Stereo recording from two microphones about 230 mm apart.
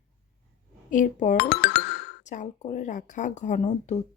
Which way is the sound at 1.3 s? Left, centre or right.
Left.